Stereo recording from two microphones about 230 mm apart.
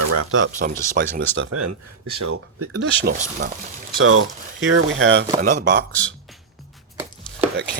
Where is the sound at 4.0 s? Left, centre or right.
Right.